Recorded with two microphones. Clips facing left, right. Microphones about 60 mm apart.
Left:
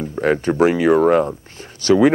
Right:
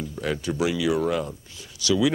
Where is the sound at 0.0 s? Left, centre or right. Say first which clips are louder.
Left 10 dB; left.